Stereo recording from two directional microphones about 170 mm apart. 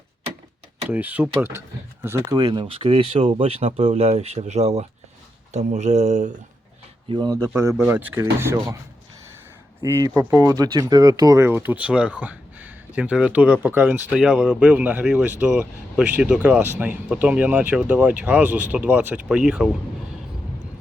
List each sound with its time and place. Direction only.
0.9 s speech: 10° right (ahead or behind)
2.4 s speech: 30° right (ahead or behind); by 6.3 s 45° right (ahead or behind)
7.1 s speech: 25° right (ahead or behind)
10.0 s speech: 20° right (ahead or behind); by 19.7 s 5° right (ahead or behind)